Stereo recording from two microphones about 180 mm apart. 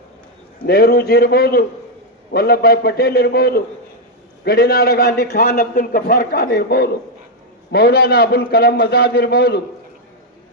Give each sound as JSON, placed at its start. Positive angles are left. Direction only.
{"t": 0.6, "sound": "a man's voice", "side_deg": 60}